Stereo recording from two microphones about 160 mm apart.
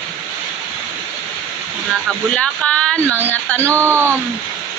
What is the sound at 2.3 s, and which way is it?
Speech, 5° left (ahead or behind).